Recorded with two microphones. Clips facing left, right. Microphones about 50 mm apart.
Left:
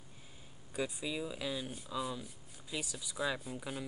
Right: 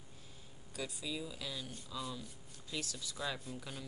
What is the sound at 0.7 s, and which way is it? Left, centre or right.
Speech, left.